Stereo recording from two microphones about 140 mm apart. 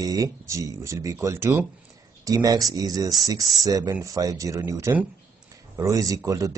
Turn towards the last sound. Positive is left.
turn(degrees=-25)  # may be behind; listen again after turning